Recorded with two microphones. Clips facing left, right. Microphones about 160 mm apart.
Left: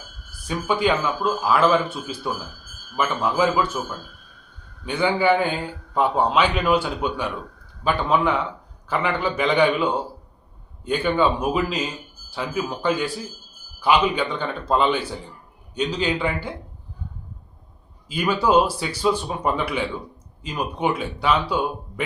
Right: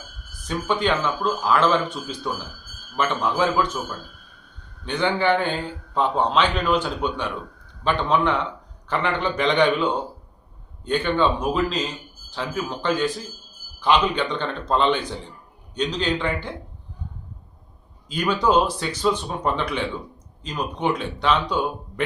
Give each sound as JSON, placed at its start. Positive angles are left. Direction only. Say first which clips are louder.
{"t": 0.4, "sound": "a man's voice", "louder": "left 1 dB", "side_deg": 10}
{"t": 18.1, "sound": "a man's voice", "louder": "left 1 dB", "side_deg": 5}